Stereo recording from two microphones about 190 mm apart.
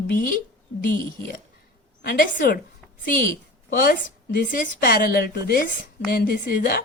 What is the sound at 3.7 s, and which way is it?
A woman's voice, 50° left (ahead or behind).